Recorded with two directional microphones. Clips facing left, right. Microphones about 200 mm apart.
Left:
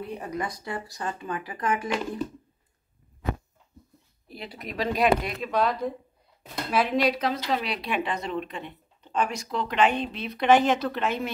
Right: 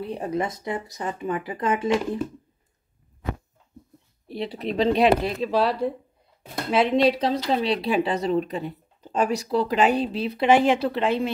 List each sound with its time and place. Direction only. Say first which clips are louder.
0.0 s speech: right 5 dB; 30° right (ahead or behind)
4.3 s speech: right 10 dB; 30° right (ahead or behind)